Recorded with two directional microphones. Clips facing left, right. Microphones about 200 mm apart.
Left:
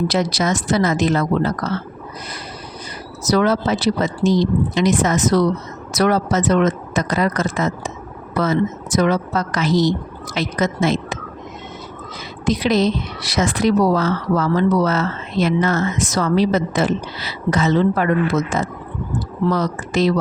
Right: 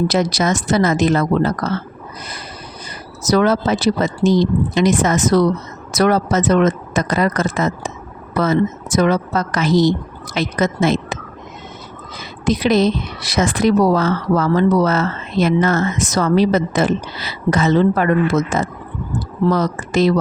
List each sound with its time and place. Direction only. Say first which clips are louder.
0.1 s a woman's voice: right 2 dB; 45° right (ahead or behind)
3.2 s a woman's voice: right 2 dB; 50° right (ahead or behind)
12.5 s a woman's voice: right 2 dB; 50° right (ahead or behind)